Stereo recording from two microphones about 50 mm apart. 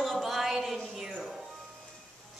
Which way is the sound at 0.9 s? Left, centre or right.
Centre.